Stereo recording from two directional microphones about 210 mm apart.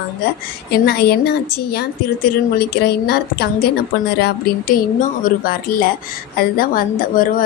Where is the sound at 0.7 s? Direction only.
50° left (ahead or behind).